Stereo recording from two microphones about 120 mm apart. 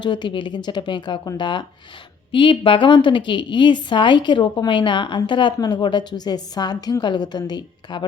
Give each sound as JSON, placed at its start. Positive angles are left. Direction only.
{"t": 0.0, "sound": "a woman's voice", "side_deg": 40}